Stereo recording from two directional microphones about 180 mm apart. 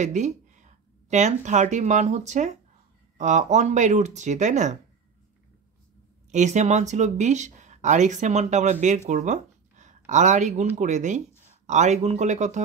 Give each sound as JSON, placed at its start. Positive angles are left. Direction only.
{"t": 0.0, "sound": "speech", "side_deg": -40}
{"t": 6.3, "sound": "speech", "side_deg": -40}